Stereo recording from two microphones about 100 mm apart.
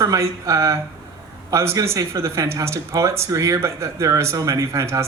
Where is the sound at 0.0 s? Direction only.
35° right (ahead or behind).